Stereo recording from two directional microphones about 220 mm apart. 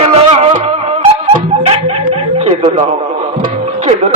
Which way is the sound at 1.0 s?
30° right (ahead or behind).